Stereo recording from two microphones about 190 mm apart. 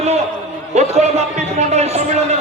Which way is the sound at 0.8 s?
35° right (ahead or behind).